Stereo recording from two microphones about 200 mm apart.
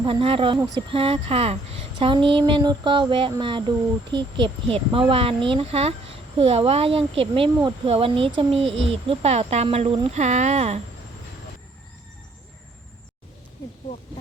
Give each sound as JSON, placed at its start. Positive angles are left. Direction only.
{"t": 0.0, "sound": "speech", "side_deg": -25}